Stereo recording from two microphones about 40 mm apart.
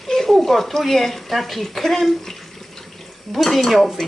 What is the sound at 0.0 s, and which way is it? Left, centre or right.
Speech, centre.